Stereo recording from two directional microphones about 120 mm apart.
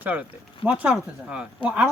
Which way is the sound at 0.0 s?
15° right (ahead or behind).